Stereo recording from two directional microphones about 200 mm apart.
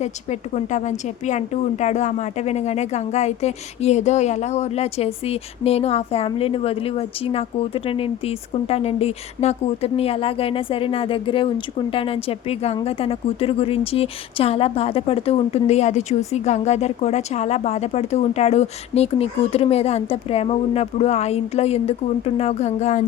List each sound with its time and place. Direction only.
0.0 s a woman's voice: 35° left (ahead or behind)